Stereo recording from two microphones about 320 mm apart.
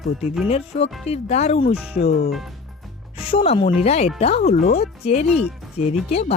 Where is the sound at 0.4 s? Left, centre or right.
Centre.